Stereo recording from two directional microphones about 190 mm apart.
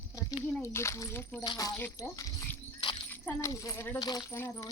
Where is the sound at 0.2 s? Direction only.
15° left (ahead or behind).